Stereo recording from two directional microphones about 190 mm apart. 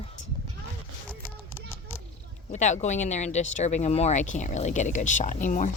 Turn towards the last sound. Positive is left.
turn(degrees=40)  # may be behind; listen again after turning